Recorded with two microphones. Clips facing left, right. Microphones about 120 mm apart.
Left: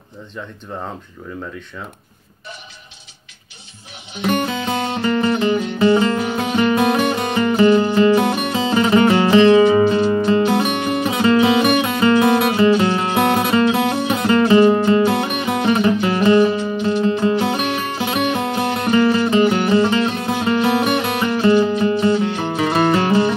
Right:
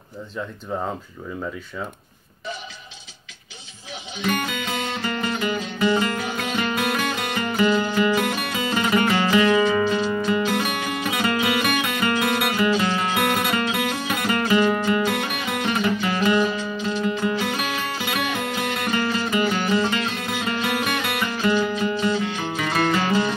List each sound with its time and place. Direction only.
4.3 s music: 25° left (ahead or behind)